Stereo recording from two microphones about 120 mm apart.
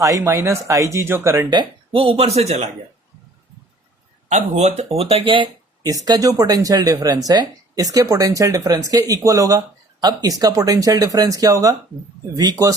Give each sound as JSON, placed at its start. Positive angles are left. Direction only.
{"t": 0.0, "sound": "speech", "side_deg": -25}
{"t": 1.5, "sound": "speech", "side_deg": -45}
{"t": 4.3, "sound": "speech", "side_deg": -75}
{"t": 4.9, "sound": "speech", "side_deg": -55}
{"t": 5.9, "sound": "speech", "side_deg": -30}